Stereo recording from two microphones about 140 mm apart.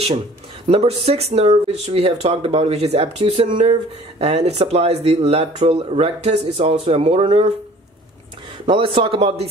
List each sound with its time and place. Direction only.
0.7 s speech: 45° right (ahead or behind)
8.6 s speech: 40° right (ahead or behind)